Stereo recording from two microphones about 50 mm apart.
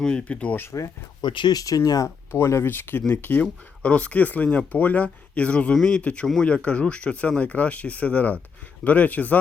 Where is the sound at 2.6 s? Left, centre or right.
Left.